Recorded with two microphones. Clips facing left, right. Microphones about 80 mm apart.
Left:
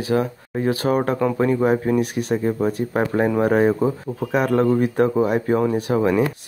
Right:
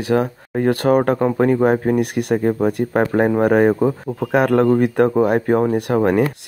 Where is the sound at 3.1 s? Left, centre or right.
Right.